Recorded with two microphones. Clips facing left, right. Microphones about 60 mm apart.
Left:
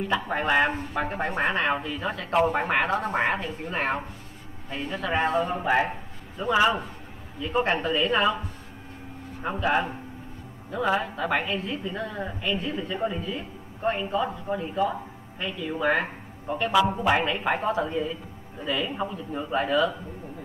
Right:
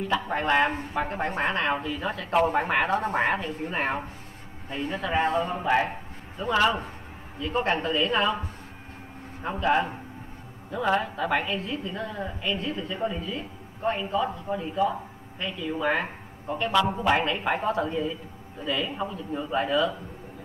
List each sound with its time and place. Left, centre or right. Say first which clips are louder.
0.1 s a man's voice: even; centre
5.1 s speech: even; centre
5.4 s a man's voice: left 1 dB; centre
9.4 s a man's voice: right 1 dB; centre